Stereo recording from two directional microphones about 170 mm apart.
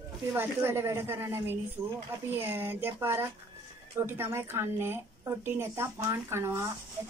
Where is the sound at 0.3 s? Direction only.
15° right (ahead or behind).